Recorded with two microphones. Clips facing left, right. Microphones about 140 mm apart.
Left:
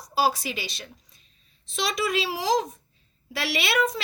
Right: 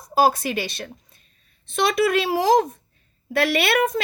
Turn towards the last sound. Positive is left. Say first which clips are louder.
# right 5 dB
turn(degrees=-55)  # may be behind; listen again after turning